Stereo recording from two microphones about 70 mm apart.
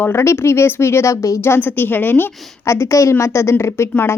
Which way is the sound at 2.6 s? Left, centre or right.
Left.